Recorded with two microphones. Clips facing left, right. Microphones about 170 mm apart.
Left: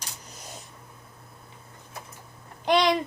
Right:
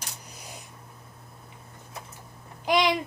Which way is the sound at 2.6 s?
10° right (ahead or behind).